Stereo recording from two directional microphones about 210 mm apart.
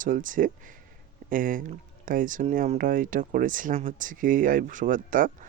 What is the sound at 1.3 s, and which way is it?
Speech, 40° right (ahead or behind).